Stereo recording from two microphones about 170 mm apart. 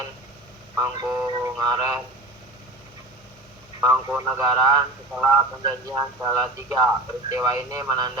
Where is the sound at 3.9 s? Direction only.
15° right (ahead or behind).